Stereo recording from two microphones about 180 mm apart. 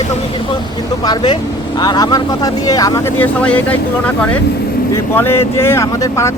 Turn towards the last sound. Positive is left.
turn(degrees=15)  # may be behind; listen again after turning